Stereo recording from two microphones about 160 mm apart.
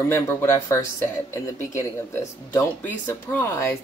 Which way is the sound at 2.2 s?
15° left (ahead or behind).